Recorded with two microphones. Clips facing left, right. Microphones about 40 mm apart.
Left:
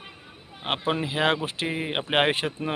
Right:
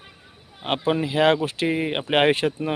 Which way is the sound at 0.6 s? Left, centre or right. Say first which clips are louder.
Right 4 dB; centre.